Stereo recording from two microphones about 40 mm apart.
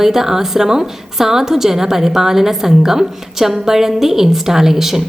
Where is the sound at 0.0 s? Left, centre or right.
Centre.